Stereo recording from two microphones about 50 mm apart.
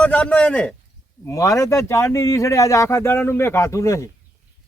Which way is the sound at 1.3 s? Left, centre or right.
Left.